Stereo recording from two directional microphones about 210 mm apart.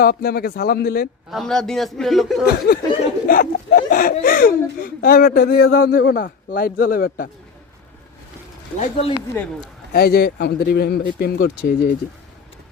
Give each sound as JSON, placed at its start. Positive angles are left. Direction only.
{"t": 0.0, "sound": "speech", "side_deg": 45}
{"t": 1.3, "sound": "a man's voice", "side_deg": 0}
{"t": 2.7, "sound": "speech", "side_deg": 45}
{"t": 8.8, "sound": "speech", "side_deg": 30}
{"t": 9.3, "sound": "a man's voice", "side_deg": 5}
{"t": 9.9, "sound": "speech", "side_deg": 50}